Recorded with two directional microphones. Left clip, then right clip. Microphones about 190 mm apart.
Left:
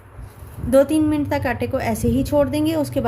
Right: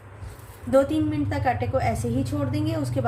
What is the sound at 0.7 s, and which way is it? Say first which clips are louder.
A woman's voice: left 5 dB; 60° left (ahead or behind).